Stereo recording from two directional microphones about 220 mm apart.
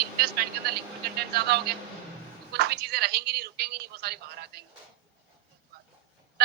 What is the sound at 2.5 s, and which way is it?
A man's voice, 45° right (ahead or behind).